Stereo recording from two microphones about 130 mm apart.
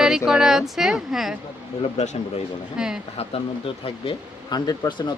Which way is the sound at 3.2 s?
45° left (ahead or behind).